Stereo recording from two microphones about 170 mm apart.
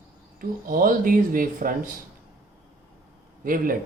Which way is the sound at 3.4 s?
55° right (ahead or behind).